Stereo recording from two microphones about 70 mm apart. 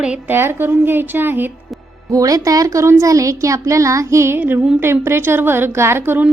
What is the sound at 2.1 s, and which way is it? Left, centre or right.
Music, right.